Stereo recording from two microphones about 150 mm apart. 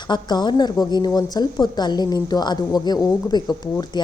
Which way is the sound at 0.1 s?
30° left (ahead or behind).